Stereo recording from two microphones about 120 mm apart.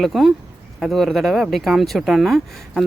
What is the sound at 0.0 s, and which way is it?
Speech, centre (ahead or behind).